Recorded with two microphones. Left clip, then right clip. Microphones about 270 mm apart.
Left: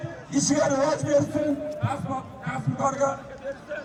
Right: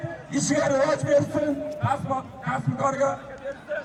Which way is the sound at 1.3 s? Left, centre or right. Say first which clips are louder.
Right 1 dB; centre.